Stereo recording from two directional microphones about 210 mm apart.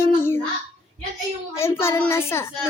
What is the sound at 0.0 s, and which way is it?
Babbling, 10° left (ahead or behind).